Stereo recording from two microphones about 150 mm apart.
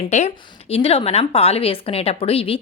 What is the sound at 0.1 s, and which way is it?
A woman's voice, 50° left (ahead or behind).